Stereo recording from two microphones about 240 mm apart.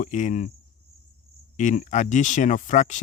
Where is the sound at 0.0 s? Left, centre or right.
Left.